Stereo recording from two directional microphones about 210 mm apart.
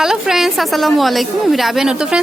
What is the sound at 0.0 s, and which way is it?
A woman's voice, centre (ahead or behind).